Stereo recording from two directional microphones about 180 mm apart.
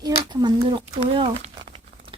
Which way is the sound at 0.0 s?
25° right (ahead or behind).